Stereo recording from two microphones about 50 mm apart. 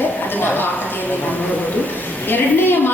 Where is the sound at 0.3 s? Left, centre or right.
Left.